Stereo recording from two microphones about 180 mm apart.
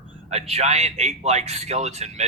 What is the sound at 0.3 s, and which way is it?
A man's voice, 35° right (ahead or behind).